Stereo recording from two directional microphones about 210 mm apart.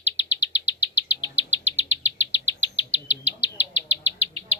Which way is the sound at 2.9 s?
30° right (ahead or behind).